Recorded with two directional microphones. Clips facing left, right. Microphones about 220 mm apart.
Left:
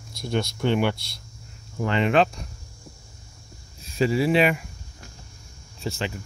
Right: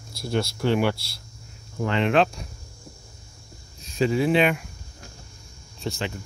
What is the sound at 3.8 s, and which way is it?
Speech, 5° left (ahead or behind).